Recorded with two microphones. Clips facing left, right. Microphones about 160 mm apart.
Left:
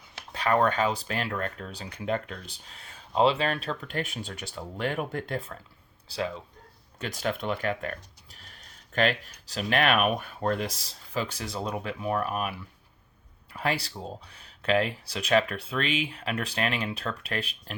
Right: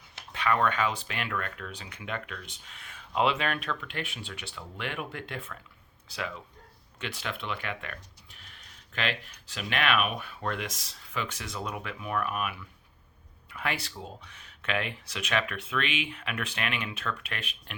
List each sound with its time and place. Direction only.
0.3 s speech: 40° left (ahead or behind)
7.0 s speech: 45° left (ahead or behind)